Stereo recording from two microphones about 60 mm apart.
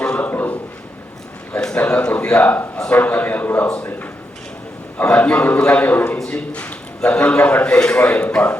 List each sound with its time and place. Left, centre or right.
0.0 s a sound: left
1.7 s a man's voice: left
5.0 s a man's voice: left
5.8 s a man's voice: left